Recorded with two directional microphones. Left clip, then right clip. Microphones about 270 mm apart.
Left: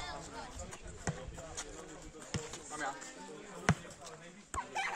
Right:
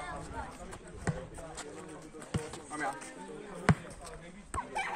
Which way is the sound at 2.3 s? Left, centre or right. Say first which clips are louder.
Right 3 dB; centre.